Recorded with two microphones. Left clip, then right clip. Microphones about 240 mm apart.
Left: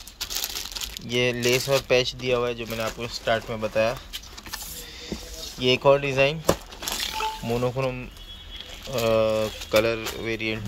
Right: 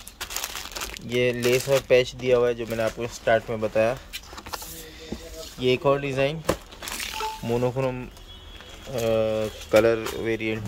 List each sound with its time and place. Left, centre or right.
1.0 s speech: centre
5.6 s speech: centre
6.4 s crumpling: left
7.4 s speech: centre
9.7 s speech: centre